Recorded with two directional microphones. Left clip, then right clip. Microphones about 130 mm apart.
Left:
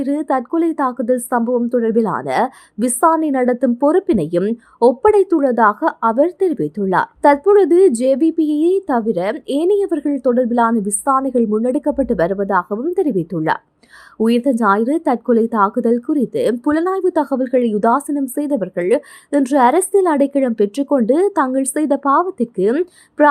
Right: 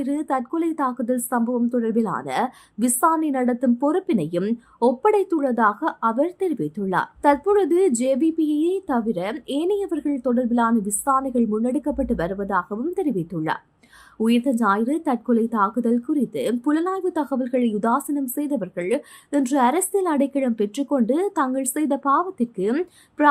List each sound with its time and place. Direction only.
0.0 s speech: 40° left (ahead or behind)
22.7 s speech: 30° left (ahead or behind)